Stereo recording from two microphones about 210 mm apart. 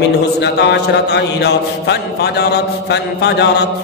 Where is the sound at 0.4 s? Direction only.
55° left (ahead or behind).